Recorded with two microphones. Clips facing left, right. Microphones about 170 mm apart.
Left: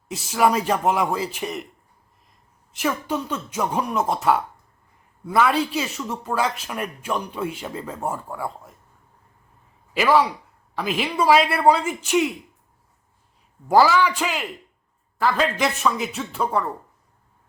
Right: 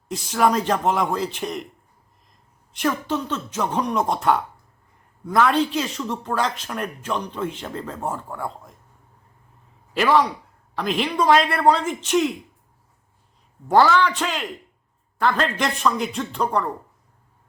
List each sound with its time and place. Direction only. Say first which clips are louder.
0.1 s a man's voice: even; 5° left (ahead or behind)
2.7 s a man's voice: right 1 dB; 5° left (ahead or behind)
9.9 s a man's voice: even; 5° left (ahead or behind)
13.7 s a man's voice: even; 5° left (ahead or behind)